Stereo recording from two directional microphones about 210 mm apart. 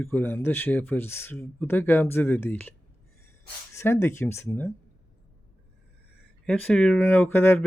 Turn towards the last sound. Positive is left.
turn(degrees=10)  # may be behind; listen again after turning